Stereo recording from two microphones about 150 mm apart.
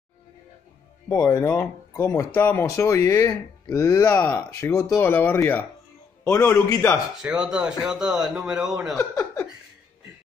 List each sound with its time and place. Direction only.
1.1 s speech: 20° left (ahead or behind)
7.2 s speech: 5° right (ahead or behind)
8.9 s speech: 20° left (ahead or behind)